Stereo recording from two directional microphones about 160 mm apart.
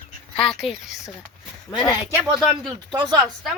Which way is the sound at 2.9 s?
25° right (ahead or behind).